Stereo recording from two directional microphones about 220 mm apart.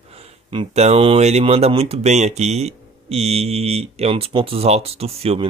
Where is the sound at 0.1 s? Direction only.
25° right (ahead or behind).